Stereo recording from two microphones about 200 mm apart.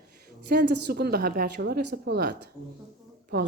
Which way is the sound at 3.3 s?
50° right (ahead or behind).